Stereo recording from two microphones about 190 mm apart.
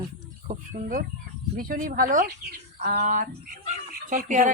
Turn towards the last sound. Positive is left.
turn(degrees=-45)  # may be behind; listen again after turning